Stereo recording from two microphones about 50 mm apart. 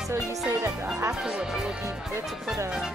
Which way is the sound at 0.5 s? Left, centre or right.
Right.